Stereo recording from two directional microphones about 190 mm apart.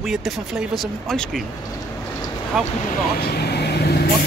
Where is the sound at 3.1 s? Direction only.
60° left (ahead or behind).